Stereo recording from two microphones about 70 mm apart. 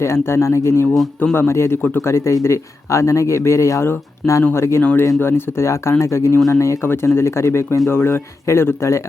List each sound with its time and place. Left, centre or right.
0.0 s speech: left